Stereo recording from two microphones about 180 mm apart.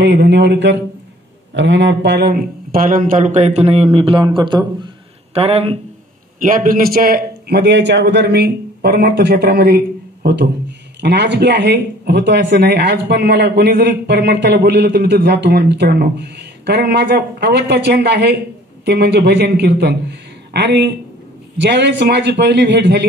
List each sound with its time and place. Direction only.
0.0 s speech: 75° right (ahead or behind); by 5.8 s 35° right (ahead or behind)
6.4 s a man's voice: 50° right (ahead or behind); by 23.0 s 75° right (ahead or behind)